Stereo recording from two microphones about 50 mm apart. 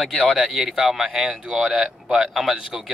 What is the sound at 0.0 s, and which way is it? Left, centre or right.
A man's voice, centre.